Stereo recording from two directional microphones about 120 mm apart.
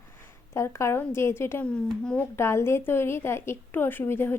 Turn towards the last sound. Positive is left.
turn(degrees=20)  # may be behind; listen again after turning